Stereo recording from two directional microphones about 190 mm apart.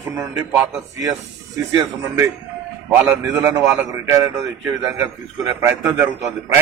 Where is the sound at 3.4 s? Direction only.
15° right (ahead or behind).